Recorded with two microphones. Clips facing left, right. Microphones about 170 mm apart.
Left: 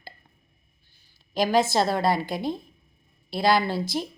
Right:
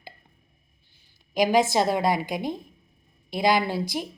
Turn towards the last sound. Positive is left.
turn(degrees=-15)  # may be behind; listen again after turning